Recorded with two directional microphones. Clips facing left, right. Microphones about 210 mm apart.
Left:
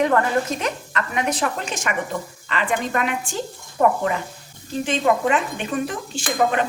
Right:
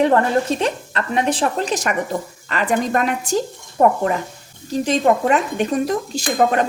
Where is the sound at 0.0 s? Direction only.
30° right (ahead or behind).